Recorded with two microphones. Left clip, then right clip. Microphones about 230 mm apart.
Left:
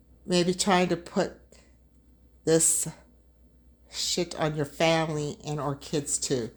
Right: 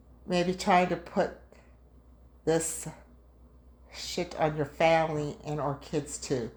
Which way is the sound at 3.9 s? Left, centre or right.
Left.